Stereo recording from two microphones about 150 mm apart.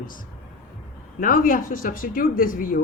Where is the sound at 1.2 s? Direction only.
65° left (ahead or behind).